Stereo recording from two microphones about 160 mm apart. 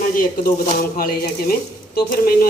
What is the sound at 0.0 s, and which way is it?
Speech, 60° left (ahead or behind).